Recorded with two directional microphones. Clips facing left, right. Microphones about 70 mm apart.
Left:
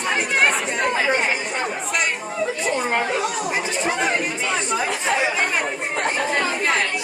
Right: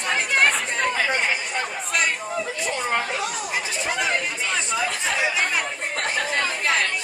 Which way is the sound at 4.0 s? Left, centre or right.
Left.